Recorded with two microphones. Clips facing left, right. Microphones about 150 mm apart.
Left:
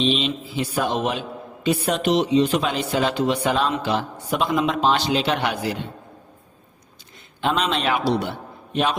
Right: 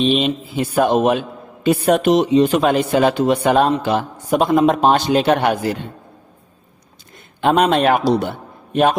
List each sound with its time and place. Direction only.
0.0 s speech: 50° right (ahead or behind)
7.4 s a man's voice: 50° right (ahead or behind)